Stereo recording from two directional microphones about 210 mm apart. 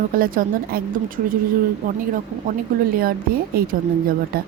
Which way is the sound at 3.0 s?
45° right (ahead or behind).